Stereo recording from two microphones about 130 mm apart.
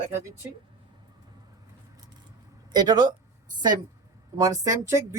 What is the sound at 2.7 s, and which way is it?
Speech, 30° right (ahead or behind).